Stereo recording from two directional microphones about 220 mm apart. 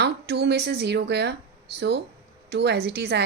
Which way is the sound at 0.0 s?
50° right (ahead or behind).